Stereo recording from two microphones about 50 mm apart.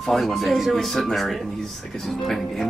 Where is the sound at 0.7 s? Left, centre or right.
Centre.